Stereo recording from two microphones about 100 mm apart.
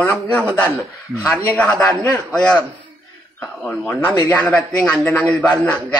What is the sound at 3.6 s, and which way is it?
Speech, 15° left (ahead or behind).